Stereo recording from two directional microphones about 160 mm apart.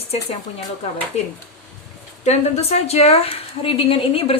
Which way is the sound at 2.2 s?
45° left (ahead or behind).